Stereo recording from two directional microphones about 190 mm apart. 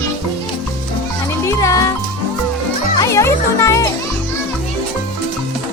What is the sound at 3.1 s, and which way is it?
Music, 15° left (ahead or behind).